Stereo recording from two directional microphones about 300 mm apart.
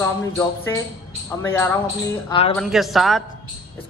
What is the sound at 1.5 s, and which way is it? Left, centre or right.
Speech, centre.